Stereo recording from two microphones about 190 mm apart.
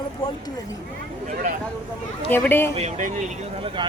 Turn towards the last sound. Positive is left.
turn(degrees=-40)  # may be behind; listen again after turning